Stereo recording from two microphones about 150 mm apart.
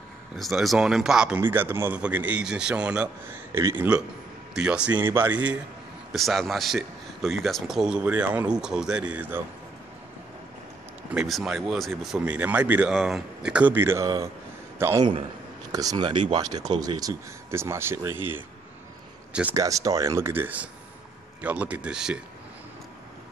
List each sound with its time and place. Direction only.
0.4 s speech: centre (ahead or behind)
6.1 s speech: centre (ahead or behind)
11.1 s speech: centre (ahead or behind)
19.5 s speech: 20° right (ahead or behind); by 22.2 s 5° right (ahead or behind)